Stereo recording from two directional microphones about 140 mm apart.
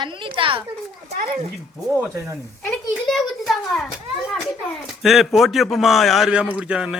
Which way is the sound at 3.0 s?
Centre (ahead or behind).